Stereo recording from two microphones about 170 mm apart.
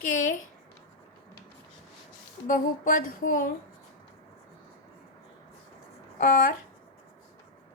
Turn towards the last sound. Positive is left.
turn(degrees=55)  # may be behind; listen again after turning